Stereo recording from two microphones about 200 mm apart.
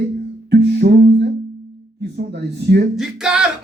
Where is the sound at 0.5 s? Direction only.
55° right (ahead or behind).